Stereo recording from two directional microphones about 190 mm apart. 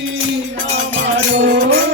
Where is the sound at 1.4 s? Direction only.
60° right (ahead or behind).